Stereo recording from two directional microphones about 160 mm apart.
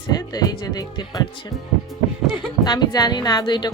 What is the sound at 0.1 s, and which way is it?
Music, 25° left (ahead or behind).